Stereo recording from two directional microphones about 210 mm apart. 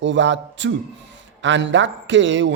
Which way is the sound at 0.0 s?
60° right (ahead or behind).